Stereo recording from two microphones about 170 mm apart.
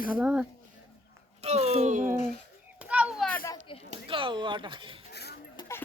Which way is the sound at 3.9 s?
30° right (ahead or behind).